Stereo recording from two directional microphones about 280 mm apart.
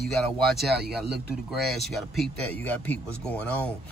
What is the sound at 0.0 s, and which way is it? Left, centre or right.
Speech, centre.